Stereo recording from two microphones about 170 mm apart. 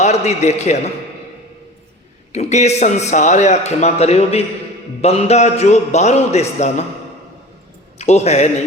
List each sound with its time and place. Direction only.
0.0 s a man's voice: 40° left (ahead or behind)
2.3 s a man's voice: 40° left (ahead or behind)
7.9 s a man's voice: 40° left (ahead or behind)